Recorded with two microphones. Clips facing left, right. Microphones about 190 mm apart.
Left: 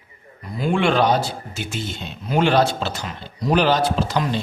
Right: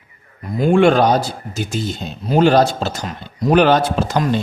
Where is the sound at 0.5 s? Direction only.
45° right (ahead or behind).